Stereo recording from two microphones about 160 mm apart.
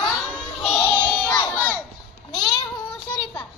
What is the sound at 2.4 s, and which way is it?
Child singing, 25° left (ahead or behind).